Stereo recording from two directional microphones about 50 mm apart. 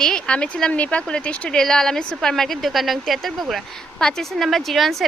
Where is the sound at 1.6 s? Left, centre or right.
Centre.